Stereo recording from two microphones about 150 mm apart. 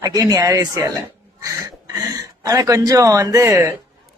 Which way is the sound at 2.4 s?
20° right (ahead or behind).